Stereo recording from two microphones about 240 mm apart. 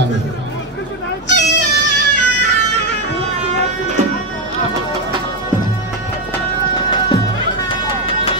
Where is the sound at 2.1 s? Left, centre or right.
Left.